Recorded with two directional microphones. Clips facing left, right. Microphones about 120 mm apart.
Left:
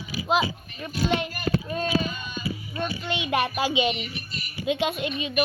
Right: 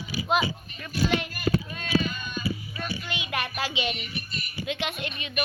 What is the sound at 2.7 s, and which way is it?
A woman's voice, 30° left (ahead or behind).